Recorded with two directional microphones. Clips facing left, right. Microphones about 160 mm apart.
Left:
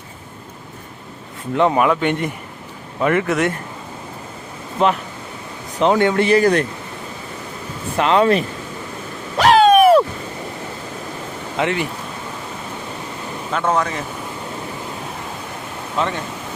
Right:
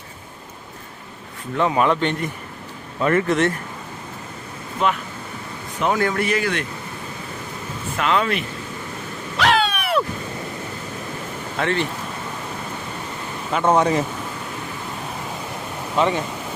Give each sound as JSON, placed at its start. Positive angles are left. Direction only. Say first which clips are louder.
{"t": 1.5, "sound": "speech", "louder": "left 3 dB", "side_deg": 20}
{"t": 4.8, "sound": "speech", "louder": "left 4 dB", "side_deg": 30}
{"t": 7.9, "sound": "speech", "louder": "left 6 dB", "side_deg": 30}
{"t": 9.4, "sound": "a sound", "louder": "left 10 dB", "side_deg": 40}
{"t": 11.5, "sound": "speech", "louder": "left 2 dB", "side_deg": 15}
{"t": 13.5, "sound": "speech", "louder": "right 2 dB", "side_deg": -10}
{"t": 13.7, "sound": "speech", "louder": "right 3 dB", "side_deg": -30}
{"t": 16.0, "sound": "speech", "louder": "right 3 dB", "side_deg": 0}